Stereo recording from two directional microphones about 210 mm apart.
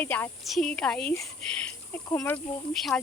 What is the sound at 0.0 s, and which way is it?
Speech, 10° left (ahead or behind).